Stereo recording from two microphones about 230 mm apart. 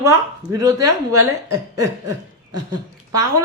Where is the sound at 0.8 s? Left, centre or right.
Right.